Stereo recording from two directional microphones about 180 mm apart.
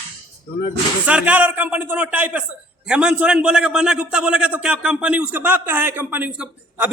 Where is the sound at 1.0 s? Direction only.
10° right (ahead or behind).